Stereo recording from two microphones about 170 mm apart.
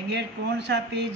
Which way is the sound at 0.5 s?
90° right.